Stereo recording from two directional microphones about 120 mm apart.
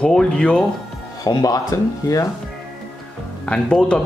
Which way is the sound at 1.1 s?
30° left (ahead or behind).